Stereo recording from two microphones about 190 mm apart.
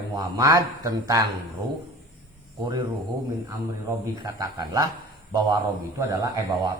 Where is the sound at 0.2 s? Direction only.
20° right (ahead or behind).